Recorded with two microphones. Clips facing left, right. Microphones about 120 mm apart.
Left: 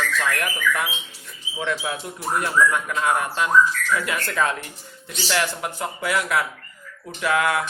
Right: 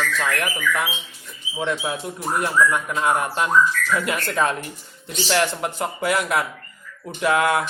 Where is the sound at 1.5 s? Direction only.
25° right (ahead or behind).